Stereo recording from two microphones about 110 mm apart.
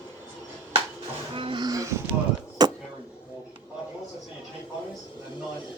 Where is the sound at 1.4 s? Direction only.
50° right (ahead or behind).